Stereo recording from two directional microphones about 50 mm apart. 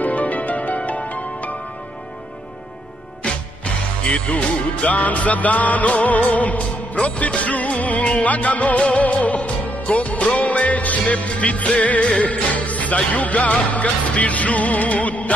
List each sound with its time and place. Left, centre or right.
0.0 s music: left
3.3 s music: left